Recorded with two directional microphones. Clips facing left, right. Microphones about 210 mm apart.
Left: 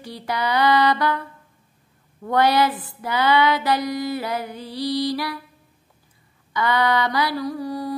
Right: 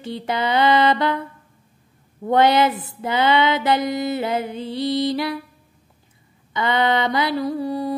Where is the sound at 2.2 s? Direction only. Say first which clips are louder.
Right 3 dB; 20° right (ahead or behind).